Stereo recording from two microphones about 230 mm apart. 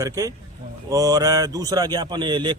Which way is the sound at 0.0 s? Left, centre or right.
Centre.